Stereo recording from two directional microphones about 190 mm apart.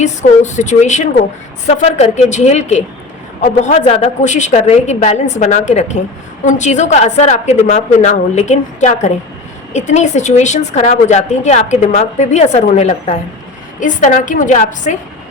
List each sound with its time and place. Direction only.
0.0 s a woman's voice: 40° left (ahead or behind)